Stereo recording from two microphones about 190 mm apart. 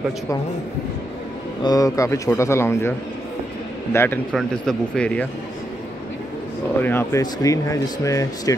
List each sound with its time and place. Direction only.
1.6 s speech: 20° left (ahead or behind)
3.9 s speech: 10° left (ahead or behind)
6.8 s speech: 10° left (ahead or behind)